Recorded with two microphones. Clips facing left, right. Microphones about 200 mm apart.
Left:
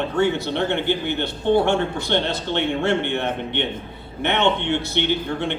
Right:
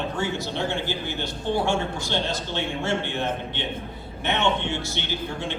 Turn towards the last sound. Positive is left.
turn(degrees=60)  # may be behind; listen again after turning